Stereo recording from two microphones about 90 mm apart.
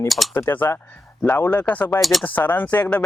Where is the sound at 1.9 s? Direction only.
Centre (ahead or behind).